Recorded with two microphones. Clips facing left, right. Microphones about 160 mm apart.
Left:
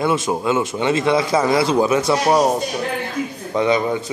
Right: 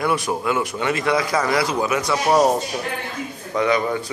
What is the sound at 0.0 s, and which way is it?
A man's voice, 25° left (ahead or behind).